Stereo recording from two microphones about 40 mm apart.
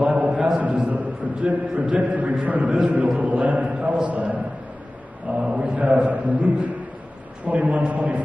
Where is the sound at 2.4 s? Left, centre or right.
Right.